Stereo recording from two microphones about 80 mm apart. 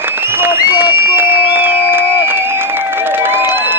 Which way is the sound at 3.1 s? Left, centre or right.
Right.